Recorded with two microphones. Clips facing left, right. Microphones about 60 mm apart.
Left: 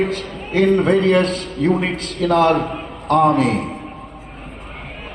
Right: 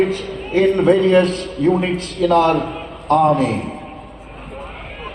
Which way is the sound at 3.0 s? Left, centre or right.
Right.